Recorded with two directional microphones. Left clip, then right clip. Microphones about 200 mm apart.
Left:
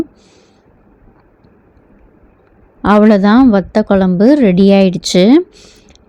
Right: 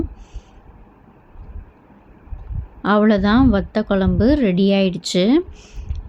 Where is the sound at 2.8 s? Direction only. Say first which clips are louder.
Left 7 dB; 35° left (ahead or behind).